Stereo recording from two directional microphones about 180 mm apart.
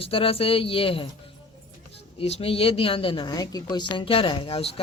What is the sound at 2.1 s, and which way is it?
A woman's voice, 35° left (ahead or behind).